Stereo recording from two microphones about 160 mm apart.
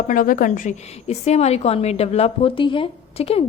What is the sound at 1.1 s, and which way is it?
A woman's voice, 40° left (ahead or behind).